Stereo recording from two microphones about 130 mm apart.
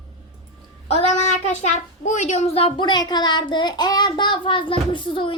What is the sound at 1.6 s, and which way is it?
A child's voice, 65° left (ahead or behind).